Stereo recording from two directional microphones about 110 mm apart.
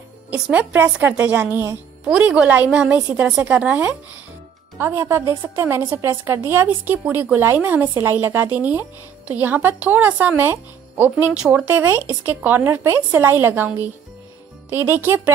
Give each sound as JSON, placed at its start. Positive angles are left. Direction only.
{"t": 0.3, "sound": "a woman's voice", "side_deg": -15}
{"t": 14.7, "sound": "a woman's voice", "side_deg": -20}